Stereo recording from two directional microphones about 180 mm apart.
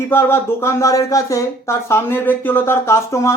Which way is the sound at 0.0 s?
15° left (ahead or behind).